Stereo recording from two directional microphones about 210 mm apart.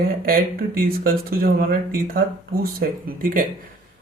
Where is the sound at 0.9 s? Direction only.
45° right (ahead or behind).